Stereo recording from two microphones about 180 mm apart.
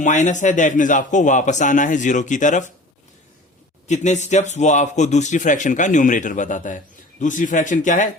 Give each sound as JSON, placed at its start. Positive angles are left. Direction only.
{"t": 0.0, "sound": "a man's voice", "side_deg": 45}
{"t": 3.8, "sound": "a man's voice", "side_deg": 40}